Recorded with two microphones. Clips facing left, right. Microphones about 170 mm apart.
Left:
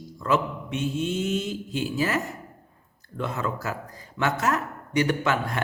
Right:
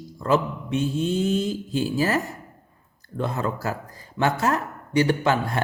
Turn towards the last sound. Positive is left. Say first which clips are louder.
# right 3 dB
turn(degrees=-30)  # may be behind; listen again after turning